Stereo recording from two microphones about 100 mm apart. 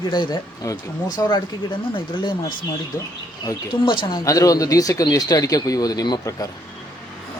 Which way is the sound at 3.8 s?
55° left (ahead or behind).